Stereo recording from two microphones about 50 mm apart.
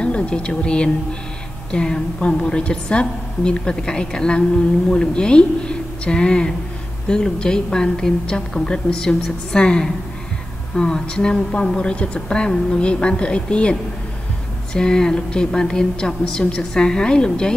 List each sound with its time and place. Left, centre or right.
0.0 s a woman's voice: left